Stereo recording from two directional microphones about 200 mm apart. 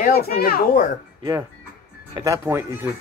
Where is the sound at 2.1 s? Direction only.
15° right (ahead or behind).